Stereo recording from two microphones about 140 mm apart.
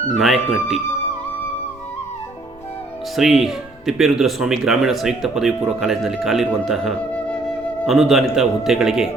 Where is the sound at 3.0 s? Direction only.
Centre (ahead or behind).